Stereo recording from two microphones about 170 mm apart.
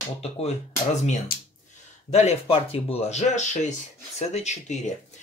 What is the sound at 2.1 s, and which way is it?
Speech, 40° left (ahead or behind).